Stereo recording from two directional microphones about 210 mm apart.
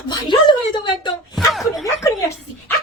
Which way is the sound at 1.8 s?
15° left (ahead or behind).